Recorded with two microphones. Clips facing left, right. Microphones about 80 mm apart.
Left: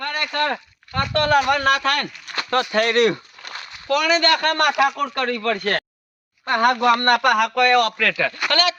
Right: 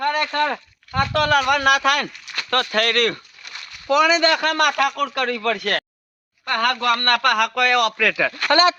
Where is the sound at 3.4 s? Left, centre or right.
Left.